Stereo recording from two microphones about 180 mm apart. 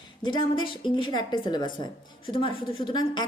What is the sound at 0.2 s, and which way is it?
A woman's voice, 25° left (ahead or behind).